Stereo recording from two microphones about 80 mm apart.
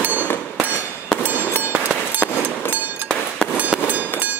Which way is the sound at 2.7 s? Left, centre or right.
Right.